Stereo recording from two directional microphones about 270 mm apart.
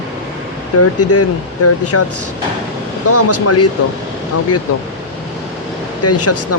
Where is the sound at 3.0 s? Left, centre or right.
Left.